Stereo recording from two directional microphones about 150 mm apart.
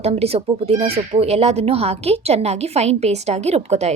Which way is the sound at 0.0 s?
45° right (ahead or behind).